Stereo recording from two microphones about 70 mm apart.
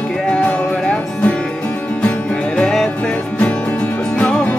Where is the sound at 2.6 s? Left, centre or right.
Centre.